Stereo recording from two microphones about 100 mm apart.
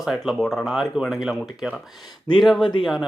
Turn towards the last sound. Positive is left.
turn(degrees=0)  # may be behind; listen again after turning